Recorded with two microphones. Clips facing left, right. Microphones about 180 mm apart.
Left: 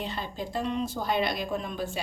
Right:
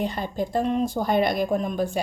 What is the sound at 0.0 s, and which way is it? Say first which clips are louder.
A woman's voice: right 7 dB; 45° right (ahead or behind).